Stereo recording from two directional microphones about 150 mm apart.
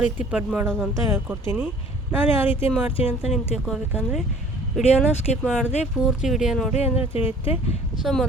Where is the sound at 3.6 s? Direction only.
Centre (ahead or behind).